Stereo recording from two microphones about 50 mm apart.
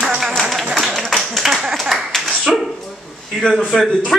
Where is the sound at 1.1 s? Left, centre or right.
Centre.